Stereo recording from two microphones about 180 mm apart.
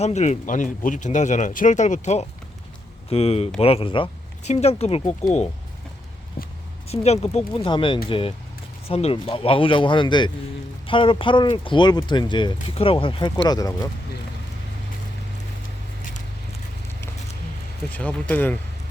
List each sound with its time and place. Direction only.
0.0 s speech: 40° left (ahead or behind)
6.4 s a sound: 55° left (ahead or behind)
6.8 s speech: 35° left (ahead or behind); by 13.7 s 20° left (ahead or behind)
17.9 s speech: 10° left (ahead or behind)